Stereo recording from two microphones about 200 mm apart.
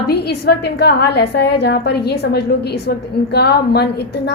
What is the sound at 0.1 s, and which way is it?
A woman's voice, 55° left (ahead or behind).